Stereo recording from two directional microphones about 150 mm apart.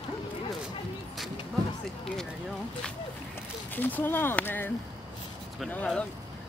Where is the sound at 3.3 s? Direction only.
10° left (ahead or behind).